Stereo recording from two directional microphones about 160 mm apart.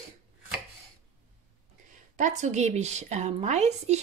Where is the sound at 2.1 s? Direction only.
50° right (ahead or behind).